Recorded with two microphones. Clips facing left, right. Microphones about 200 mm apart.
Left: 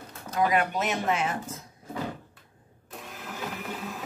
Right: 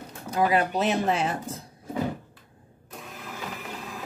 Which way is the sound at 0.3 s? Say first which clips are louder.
Right 2 dB; 30° right (ahead or behind).